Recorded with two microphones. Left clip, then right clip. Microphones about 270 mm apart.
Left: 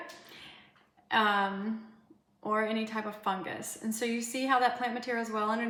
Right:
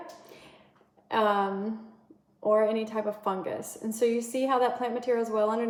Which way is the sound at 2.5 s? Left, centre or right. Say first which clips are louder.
Right 4 dB; centre.